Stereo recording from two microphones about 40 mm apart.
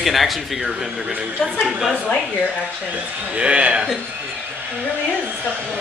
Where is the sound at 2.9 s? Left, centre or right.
Right.